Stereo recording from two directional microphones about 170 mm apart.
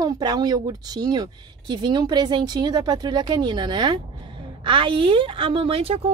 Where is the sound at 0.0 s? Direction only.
25° right (ahead or behind).